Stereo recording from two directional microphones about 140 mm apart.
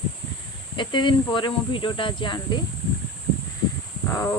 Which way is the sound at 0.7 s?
35° left (ahead or behind).